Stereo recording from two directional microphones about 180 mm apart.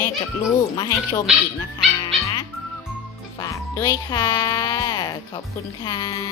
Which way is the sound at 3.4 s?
20° left (ahead or behind).